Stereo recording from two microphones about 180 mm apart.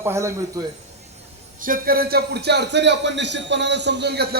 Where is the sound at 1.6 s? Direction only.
50° right (ahead or behind).